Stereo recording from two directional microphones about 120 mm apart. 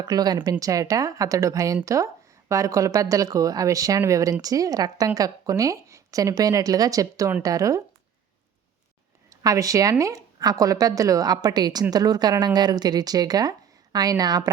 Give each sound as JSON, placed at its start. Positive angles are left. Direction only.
{"t": 0.0, "sound": "a woman's voice", "side_deg": -35}
{"t": 9.3, "sound": "a woman's voice", "side_deg": -30}